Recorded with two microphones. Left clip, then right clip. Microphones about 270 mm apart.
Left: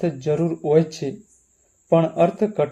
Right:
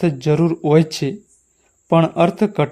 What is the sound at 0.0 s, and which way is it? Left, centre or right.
A man's voice, right.